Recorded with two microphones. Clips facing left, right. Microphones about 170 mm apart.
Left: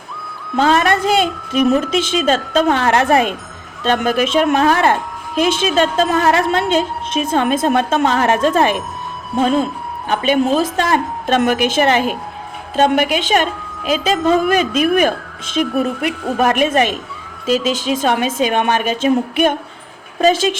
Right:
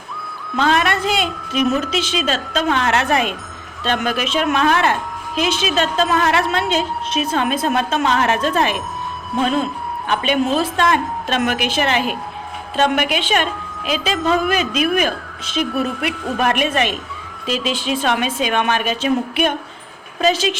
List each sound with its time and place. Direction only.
0.5 s music: 45° left (ahead or behind)
1.5 s a woman's voice: 50° left (ahead or behind)
2.8 s a woman's voice: 40° left (ahead or behind)
10.1 s a woman's voice: 45° left (ahead or behind)